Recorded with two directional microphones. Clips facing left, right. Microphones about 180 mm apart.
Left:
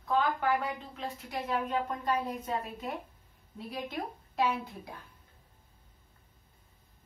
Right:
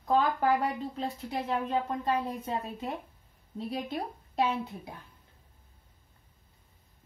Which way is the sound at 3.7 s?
30° right (ahead or behind).